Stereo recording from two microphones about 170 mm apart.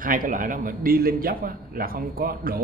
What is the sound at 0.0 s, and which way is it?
Speech, 55° right (ahead or behind).